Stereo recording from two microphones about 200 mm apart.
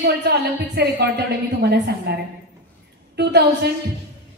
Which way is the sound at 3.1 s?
55° right (ahead or behind).